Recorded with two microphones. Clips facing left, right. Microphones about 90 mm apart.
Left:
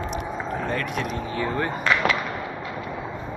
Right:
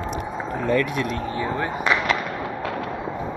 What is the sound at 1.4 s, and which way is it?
Speech, 15° right (ahead or behind).